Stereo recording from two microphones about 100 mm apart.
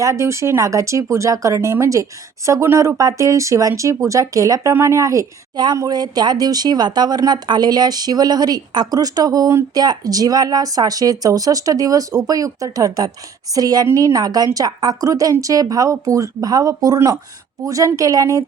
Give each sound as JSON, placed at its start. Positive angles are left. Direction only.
{"t": 0.0, "sound": "speech", "side_deg": -30}